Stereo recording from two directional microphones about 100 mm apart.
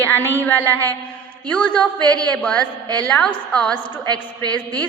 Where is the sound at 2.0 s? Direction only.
40° right (ahead or behind).